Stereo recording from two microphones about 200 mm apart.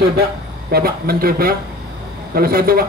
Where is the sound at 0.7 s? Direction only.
50° right (ahead or behind).